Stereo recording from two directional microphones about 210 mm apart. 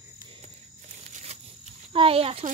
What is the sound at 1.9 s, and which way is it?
Speech, 25° right (ahead or behind).